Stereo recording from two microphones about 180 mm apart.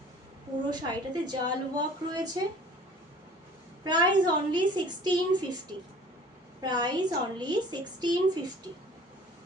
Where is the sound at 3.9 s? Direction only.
25° right (ahead or behind).